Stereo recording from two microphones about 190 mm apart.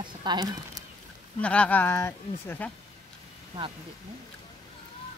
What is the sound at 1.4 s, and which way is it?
Speech, 5° left (ahead or behind).